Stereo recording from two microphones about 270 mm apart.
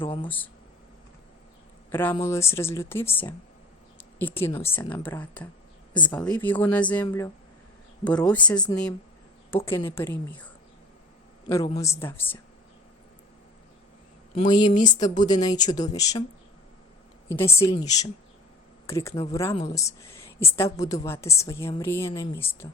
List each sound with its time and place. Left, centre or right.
0.0 s speech: centre
0.3 s speech: centre
1.9 s speech: centre
9.6 s speech: centre
11.4 s a man's voice: centre
14.3 s speech: centre
17.3 s speech: centre
19.1 s speech: left
19.6 s a woman's voice: centre